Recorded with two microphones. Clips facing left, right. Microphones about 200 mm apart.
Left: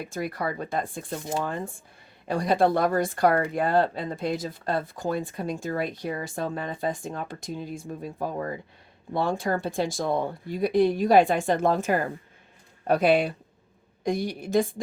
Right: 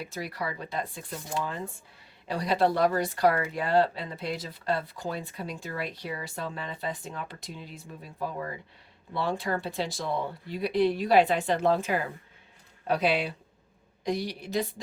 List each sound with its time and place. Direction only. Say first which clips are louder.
0.0 s speech: left 5 dB; 50° left (ahead or behind)